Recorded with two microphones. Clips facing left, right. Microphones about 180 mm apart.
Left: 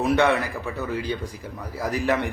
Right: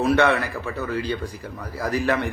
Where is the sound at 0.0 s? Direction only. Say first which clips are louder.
Right 1 dB; 15° left (ahead or behind).